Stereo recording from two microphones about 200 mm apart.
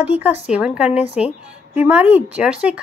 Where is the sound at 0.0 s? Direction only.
10° right (ahead or behind).